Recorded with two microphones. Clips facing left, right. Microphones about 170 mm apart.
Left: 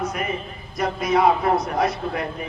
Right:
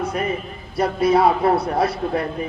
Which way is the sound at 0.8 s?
30° right (ahead or behind).